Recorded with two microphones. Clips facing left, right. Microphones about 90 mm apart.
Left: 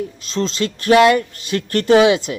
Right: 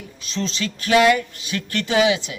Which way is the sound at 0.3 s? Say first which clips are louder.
Left 5 dB; 45° left (ahead or behind).